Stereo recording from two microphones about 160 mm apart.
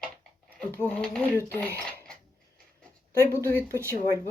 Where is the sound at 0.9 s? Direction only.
5° left (ahead or behind).